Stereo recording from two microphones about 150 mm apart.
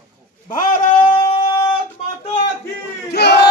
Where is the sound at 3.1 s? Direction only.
90° left.